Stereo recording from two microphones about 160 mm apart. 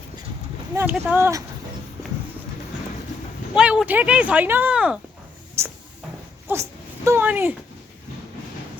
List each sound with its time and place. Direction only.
0.9 s speech: 10° right (ahead or behind)
3.5 s speech: 5° right (ahead or behind)
5.6 s a sound: 15° right (ahead or behind)
6.5 s speech: 15° right (ahead or behind)